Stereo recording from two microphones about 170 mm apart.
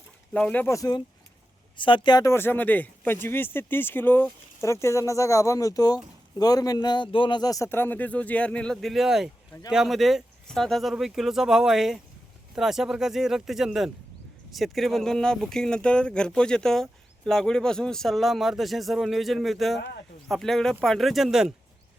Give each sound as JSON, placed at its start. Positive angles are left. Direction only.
{"t": 0.3, "sound": "a man's voice", "side_deg": 10}